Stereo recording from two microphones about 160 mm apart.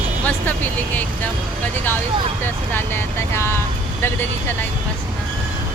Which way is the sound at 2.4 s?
15° left (ahead or behind).